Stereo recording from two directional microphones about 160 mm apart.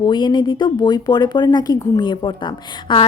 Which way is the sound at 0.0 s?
30° left (ahead or behind).